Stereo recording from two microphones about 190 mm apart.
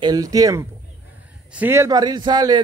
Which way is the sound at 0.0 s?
20° right (ahead or behind).